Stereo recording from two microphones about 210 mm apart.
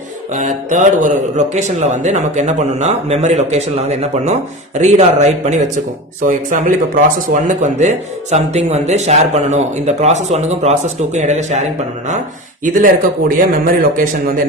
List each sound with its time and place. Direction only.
0.3 s a man's voice: 35° right (ahead or behind)
12.6 s a man's voice: 40° right (ahead or behind)